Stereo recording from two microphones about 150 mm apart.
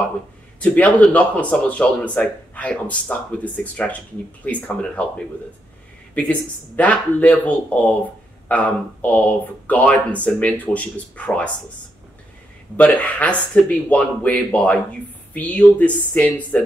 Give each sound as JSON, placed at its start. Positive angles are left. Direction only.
{"t": 0.6, "sound": "speech", "side_deg": 10}
{"t": 4.5, "sound": "speech", "side_deg": 10}
{"t": 6.8, "sound": "speech", "side_deg": 10}
{"t": 12.7, "sound": "speech", "side_deg": 10}